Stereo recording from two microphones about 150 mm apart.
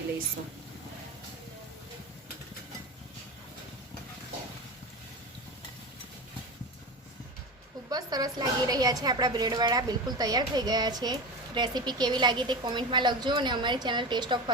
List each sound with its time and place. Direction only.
7.9 s a woman's voice: 25° right (ahead or behind)